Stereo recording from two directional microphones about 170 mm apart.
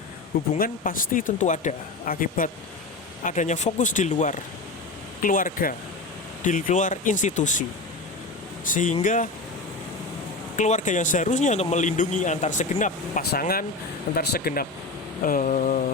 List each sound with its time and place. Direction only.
0.6 s speech: 55° left (ahead or behind)
8.6 s speech: 50° left (ahead or behind)
10.6 s speech: 45° left (ahead or behind)
13.3 s speech: 60° left (ahead or behind)